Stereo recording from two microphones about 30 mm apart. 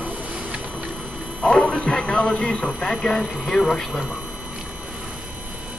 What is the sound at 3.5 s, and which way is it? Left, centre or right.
Speech, left.